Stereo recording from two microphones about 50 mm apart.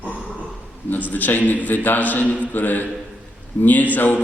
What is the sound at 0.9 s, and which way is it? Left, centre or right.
A man's voice, left.